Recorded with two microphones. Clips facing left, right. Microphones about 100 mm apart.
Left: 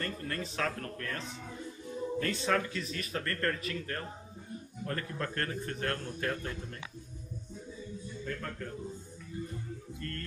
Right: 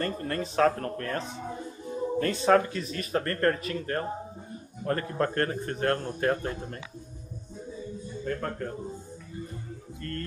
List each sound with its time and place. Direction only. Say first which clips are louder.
0.0 s a man's voice: right 7 dB; 40° right (ahead or behind)
1.1 s speech: right 8 dB; 55° right (ahead or behind)
1.4 s music: right 6 dB; 35° right (ahead or behind)
2.4 s a man's voice: right 12 dB; 40° right (ahead or behind)
8.1 s speech: right 8 dB; 40° right (ahead or behind)
10.0 s a man's voice: right 6 dB; 35° right (ahead or behind)